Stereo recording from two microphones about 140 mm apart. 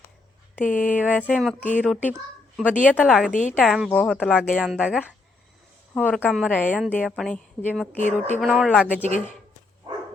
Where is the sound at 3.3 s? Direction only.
65° left (ahead or behind).